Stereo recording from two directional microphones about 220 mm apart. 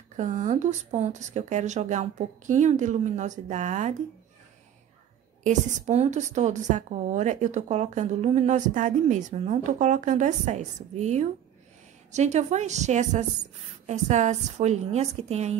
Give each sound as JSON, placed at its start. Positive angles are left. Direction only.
{"t": 0.2, "sound": "a woman's voice", "side_deg": -35}
{"t": 5.4, "sound": "a woman's voice", "side_deg": -35}